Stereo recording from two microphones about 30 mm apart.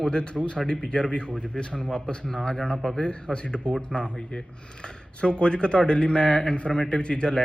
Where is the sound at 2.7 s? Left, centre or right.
Centre.